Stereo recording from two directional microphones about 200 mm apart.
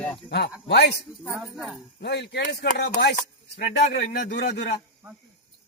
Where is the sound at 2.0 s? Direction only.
60° left (ahead or behind).